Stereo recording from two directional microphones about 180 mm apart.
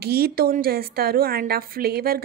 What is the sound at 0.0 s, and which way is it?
A woman's voice, 60° right (ahead or behind).